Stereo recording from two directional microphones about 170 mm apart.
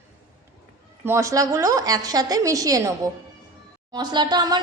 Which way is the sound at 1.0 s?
15° right (ahead or behind).